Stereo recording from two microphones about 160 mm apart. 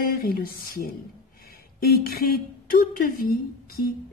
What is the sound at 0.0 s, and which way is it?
A woman's voice, 65° left (ahead or behind).